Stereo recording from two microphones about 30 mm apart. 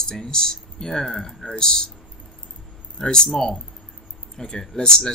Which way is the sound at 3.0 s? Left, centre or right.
Left.